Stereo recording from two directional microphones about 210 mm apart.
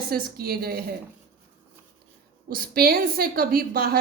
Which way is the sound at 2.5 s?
45° right (ahead or behind).